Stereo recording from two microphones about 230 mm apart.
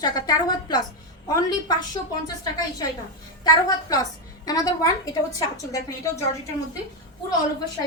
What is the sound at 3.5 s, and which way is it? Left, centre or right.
A woman's voice, centre.